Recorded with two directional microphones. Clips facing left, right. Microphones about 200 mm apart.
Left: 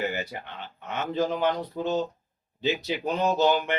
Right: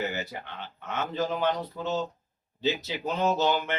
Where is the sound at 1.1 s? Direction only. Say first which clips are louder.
Left 3 dB; 15° left (ahead or behind).